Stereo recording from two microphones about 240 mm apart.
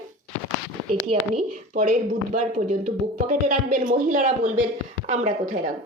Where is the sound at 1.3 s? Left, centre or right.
Right.